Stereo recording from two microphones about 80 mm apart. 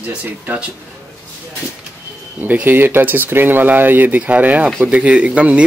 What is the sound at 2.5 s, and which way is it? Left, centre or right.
Speech, right.